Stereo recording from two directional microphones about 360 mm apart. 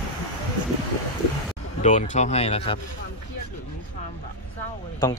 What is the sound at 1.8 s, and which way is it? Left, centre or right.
Speech, centre.